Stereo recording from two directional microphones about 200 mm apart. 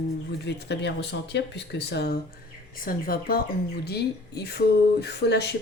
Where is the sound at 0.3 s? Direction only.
60° left (ahead or behind).